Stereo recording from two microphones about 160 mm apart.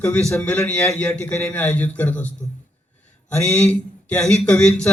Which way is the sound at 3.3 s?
15° left (ahead or behind).